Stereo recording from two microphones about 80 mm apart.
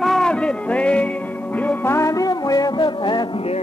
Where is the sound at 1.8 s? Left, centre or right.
Left.